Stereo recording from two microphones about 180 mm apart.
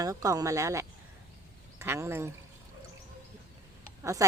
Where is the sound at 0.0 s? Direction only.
20° right (ahead or behind).